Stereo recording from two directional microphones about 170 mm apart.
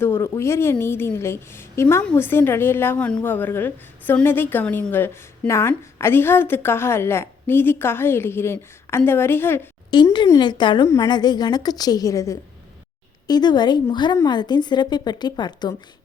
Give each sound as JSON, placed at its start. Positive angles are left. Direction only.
{"t": 0.0, "sound": "a woman's voice", "side_deg": 15}
{"t": 9.9, "sound": "a woman's voice", "side_deg": 25}